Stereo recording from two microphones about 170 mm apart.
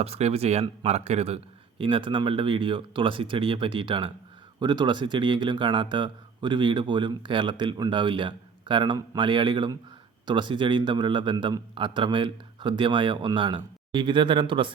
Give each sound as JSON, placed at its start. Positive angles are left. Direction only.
{"t": 0.0, "sound": "speech", "side_deg": -35}